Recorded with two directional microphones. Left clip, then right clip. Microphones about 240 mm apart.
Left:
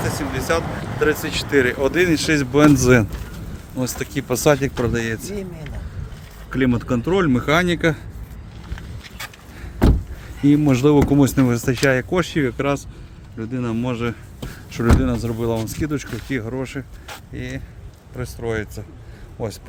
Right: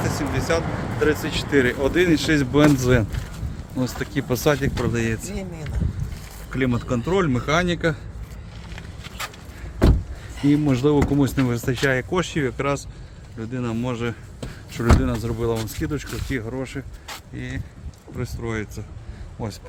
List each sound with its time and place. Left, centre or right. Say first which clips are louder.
0.0 s speech: left 1 dB; centre
6.5 s speech: left 4 dB; centre
10.4 s speech: left 4 dB; left